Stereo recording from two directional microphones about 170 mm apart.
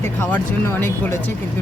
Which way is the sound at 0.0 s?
15° left (ahead or behind).